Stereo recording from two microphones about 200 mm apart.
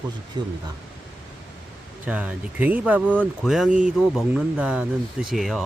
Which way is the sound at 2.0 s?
5° right (ahead or behind).